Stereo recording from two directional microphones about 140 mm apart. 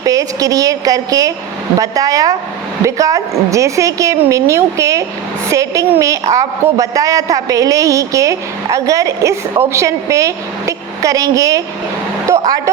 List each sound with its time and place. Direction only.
0.0 s a man's voice: 25° right (ahead or behind)